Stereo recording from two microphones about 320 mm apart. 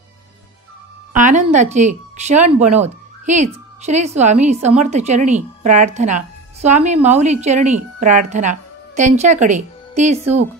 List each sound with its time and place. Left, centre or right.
1.1 s a woman's voice: right